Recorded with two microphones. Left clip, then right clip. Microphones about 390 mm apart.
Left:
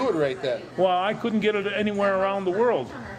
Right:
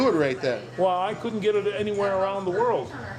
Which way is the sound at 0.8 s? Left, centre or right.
Left.